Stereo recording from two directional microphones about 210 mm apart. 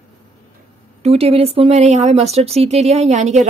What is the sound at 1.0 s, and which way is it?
Speech, 30° right (ahead or behind).